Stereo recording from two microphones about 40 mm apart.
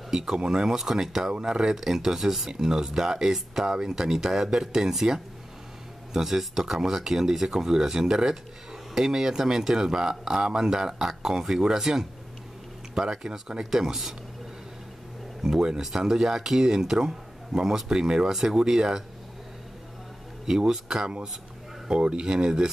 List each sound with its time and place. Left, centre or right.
0.1 s speech: centre
15.4 s speech: centre
18.3 s speech: centre
20.4 s speech: centre
21.8 s speech: right